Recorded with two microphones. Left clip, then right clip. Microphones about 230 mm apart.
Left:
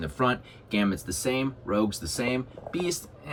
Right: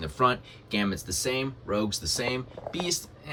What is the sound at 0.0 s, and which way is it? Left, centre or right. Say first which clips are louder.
Speech: right 2 dB; centre.